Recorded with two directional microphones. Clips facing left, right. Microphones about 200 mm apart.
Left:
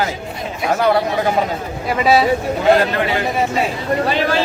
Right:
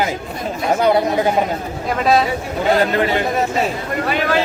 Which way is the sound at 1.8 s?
5° left (ahead or behind).